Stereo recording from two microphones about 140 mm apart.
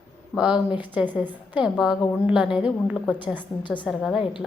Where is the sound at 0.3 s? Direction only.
5° right (ahead or behind).